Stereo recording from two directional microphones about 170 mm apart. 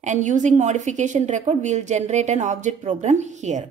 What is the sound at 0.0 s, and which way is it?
A woman's voice, 45° right (ahead or behind).